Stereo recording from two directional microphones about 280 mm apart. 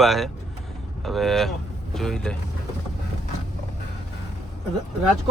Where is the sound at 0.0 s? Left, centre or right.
Centre.